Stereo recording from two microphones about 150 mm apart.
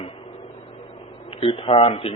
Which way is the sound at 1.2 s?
40° left (ahead or behind).